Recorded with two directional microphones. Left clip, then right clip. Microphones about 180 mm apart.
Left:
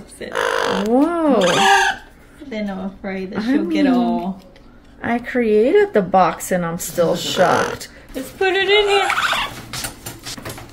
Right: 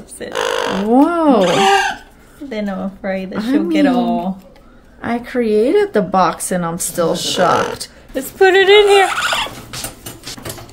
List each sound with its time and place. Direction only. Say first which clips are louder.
0.3 s speech: right 1 dB; 25° right (ahead or behind)
1.6 s speech: right 1 dB; 30° left (ahead or behind)
2.5 s speech: right 4 dB; 80° right
5.0 s speech: right 1 dB; 10° right (ahead or behind)
8.1 s turkey: right 7 dB; 60° right (ahead or behind); by 9.5 s 90° right